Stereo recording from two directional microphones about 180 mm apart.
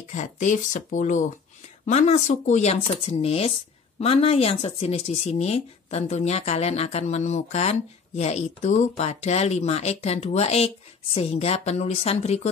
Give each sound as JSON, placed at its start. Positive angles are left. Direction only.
{"t": 0.1, "sound": "speech", "side_deg": 45}